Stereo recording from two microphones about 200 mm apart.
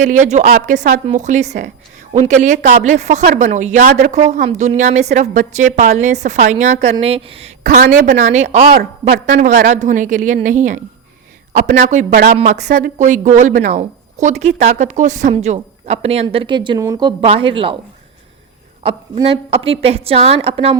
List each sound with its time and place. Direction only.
0.0 s a woman's voice: 40° right (ahead or behind)
7.7 s a woman's voice: 45° right (ahead or behind); by 17.7 s 25° right (ahead or behind)
18.8 s a woman's voice: 25° right (ahead or behind)